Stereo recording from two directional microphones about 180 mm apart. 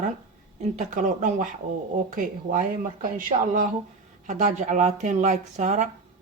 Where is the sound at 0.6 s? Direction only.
40° right (ahead or behind).